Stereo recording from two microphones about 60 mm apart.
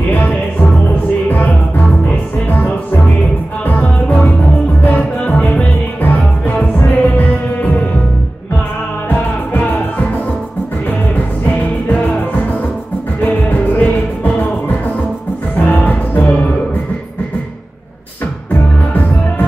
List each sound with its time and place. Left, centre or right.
3.6 s music: left
6.4 s music: left
9.1 s music: left
11.9 s music: left
18.5 s music: left